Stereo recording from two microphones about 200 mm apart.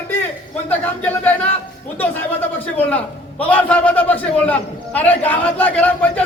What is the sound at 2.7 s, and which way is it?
A man's voice, 5° left (ahead or behind).